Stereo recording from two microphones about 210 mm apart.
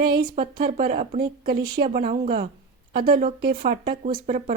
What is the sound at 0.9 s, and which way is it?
Speech, 30° right (ahead or behind).